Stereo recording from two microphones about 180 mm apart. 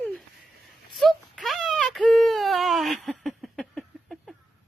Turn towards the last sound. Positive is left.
turn(degrees=0)  # may be behind; listen again after turning